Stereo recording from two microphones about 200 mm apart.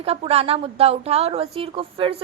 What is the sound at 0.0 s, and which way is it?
A woman's voice, 30° right (ahead or behind).